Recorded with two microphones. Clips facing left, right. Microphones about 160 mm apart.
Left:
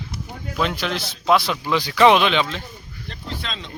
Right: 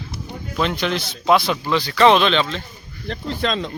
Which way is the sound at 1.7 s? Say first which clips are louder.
Even; 10° left (ahead or behind).